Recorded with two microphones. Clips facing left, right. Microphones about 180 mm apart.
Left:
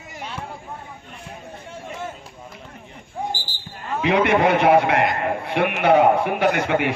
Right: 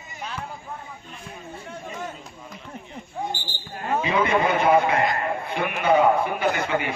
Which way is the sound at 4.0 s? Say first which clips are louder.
Left 5 dB; 70° left (ahead or behind).